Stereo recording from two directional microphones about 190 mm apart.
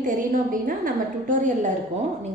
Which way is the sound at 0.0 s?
45° right (ahead or behind).